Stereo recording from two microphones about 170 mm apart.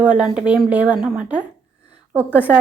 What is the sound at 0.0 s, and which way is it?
A woman's voice, 5° right (ahead or behind).